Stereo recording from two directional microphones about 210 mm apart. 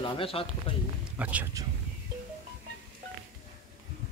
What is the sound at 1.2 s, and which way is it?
Speech, 10° right (ahead or behind).